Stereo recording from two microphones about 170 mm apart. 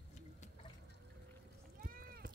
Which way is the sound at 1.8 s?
60° right (ahead or behind).